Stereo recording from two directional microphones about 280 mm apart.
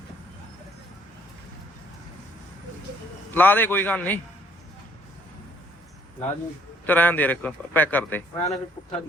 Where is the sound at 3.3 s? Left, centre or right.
Centre.